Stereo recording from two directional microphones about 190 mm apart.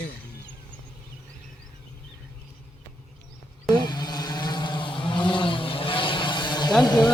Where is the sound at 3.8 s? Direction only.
20° left (ahead or behind).